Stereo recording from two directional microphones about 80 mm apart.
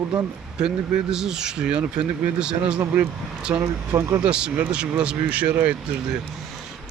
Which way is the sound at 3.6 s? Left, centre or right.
Right.